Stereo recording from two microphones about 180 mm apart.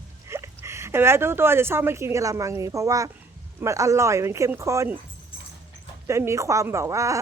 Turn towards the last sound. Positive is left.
turn(degrees=-15)  # may be behind; listen again after turning